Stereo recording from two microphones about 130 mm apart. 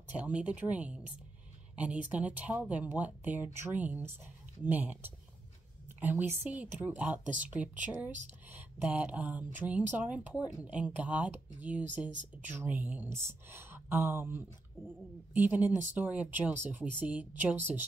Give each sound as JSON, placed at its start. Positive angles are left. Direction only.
{"t": 0.1, "sound": "speech", "side_deg": -10}